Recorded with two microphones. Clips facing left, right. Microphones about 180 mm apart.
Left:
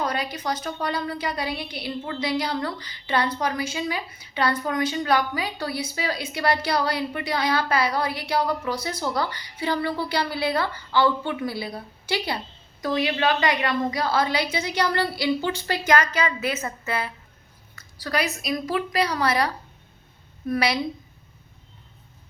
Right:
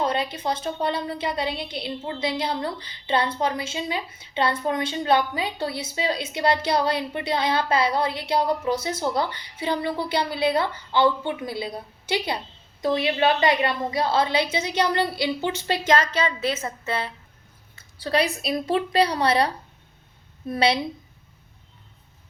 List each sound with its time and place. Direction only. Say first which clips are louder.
0.0 s a woman's voice: right 2 dB; 25° right (ahead or behind)
20.5 s a woman's voice: right 2 dB; 30° right (ahead or behind)